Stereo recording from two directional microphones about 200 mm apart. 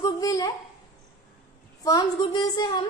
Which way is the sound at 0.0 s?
20° left (ahead or behind).